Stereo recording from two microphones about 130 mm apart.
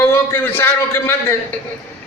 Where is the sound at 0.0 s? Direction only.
15° left (ahead or behind).